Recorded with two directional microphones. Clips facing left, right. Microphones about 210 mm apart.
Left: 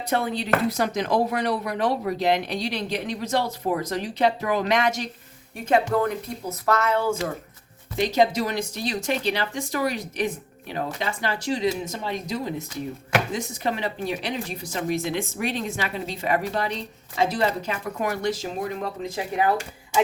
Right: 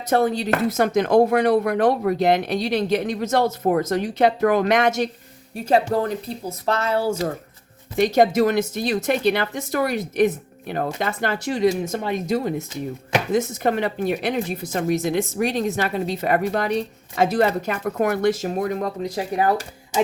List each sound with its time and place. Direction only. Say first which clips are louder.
0.1 s speech: right 5 dB; 45° right (ahead or behind)
5.6 s speech: right 2 dB; 35° right (ahead or behind)
7.9 s speech: right 4 dB; 55° right (ahead or behind)
13.3 s speech: right 7 dB; 50° right (ahead or behind)